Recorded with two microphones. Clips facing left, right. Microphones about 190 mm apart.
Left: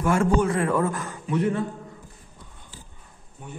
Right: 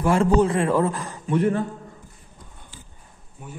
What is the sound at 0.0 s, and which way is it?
A man's voice, 30° right (ahead or behind).